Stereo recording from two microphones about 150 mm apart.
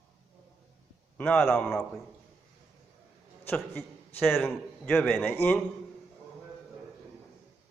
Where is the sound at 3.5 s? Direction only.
5° left (ahead or behind).